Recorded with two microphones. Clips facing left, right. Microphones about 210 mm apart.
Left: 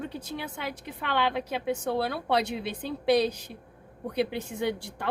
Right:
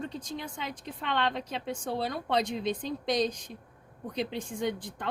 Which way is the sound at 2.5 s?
60° left (ahead or behind).